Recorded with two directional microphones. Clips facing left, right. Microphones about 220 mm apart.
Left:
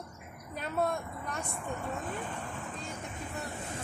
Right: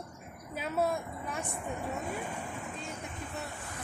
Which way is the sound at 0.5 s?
5° right (ahead or behind).